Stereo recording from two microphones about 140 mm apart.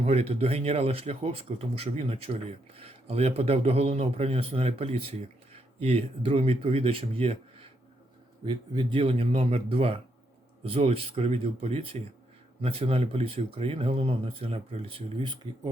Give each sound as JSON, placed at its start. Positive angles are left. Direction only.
{"t": 0.0, "sound": "speech", "side_deg": -45}